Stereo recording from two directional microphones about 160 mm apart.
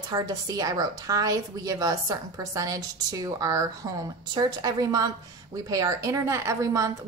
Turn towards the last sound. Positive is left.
turn(degrees=-20)  # may be behind; listen again after turning